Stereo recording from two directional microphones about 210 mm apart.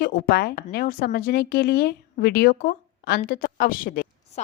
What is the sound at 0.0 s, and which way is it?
A woman's voice, 50° left (ahead or behind).